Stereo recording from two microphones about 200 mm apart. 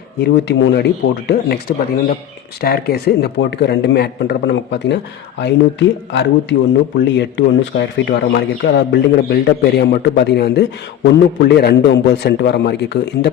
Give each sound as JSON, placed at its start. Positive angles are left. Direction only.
{"t": 0.2, "sound": "speech", "side_deg": 60}
{"t": 6.1, "sound": "speech", "side_deg": 60}